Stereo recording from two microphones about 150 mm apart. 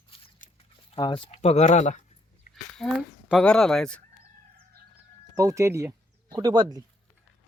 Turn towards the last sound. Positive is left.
turn(degrees=-25)  # may be behind; listen again after turning